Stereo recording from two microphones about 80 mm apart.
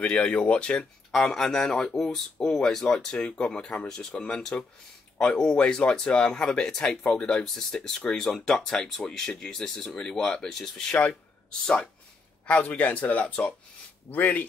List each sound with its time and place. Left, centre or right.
0.0 s speech: centre